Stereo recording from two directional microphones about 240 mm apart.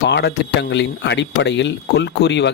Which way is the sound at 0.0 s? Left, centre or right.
Left.